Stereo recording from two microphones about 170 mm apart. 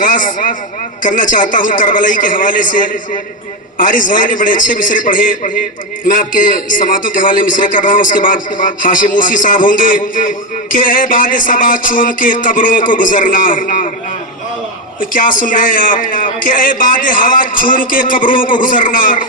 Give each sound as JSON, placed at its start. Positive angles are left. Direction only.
{"t": 0.0, "sound": "a man's voice", "side_deg": 50}
{"t": 15.1, "sound": "a man's voice", "side_deg": 55}